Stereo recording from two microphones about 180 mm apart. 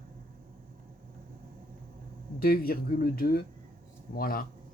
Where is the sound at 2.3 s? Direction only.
55° left (ahead or behind).